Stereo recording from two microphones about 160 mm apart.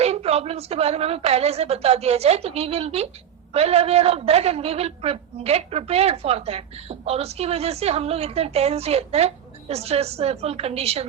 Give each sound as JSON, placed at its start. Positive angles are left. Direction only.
{"t": 0.0, "sound": "a woman's voice", "side_deg": -40}